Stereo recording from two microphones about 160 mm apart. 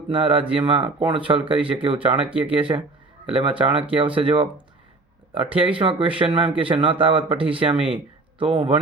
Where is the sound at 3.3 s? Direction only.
35° right (ahead or behind).